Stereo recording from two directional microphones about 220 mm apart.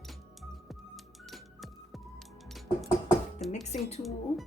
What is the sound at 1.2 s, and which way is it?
Music, centre (ahead or behind).